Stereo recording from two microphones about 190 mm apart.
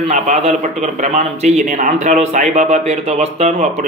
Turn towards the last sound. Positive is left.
turn(degrees=-35)  # may be behind; listen again after turning